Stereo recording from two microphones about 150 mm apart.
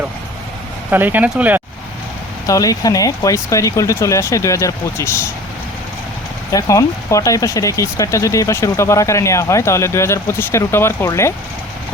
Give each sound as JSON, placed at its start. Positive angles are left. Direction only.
{"t": 0.9, "sound": "speech", "side_deg": -10}
{"t": 2.5, "sound": "speech", "side_deg": 25}
{"t": 6.5, "sound": "speech", "side_deg": 20}